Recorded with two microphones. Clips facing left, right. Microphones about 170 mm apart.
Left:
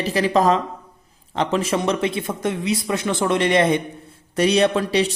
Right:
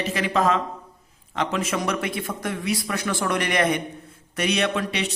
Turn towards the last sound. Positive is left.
turn(degrees=35)  # may be behind; listen again after turning